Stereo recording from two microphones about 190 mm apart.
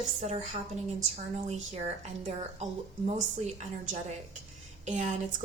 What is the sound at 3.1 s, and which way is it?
Speech, 35° right (ahead or behind).